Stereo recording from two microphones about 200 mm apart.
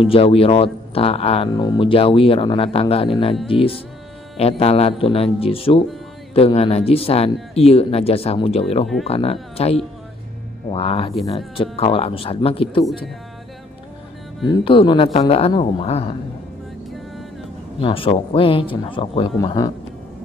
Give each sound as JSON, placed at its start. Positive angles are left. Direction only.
{"t": 0.0, "sound": "speech", "side_deg": 30}
{"t": 14.6, "sound": "speech", "side_deg": 25}
{"t": 17.7, "sound": "speech", "side_deg": 25}